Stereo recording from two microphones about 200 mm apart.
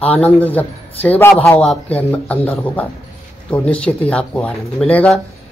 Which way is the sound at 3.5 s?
5° left (ahead or behind).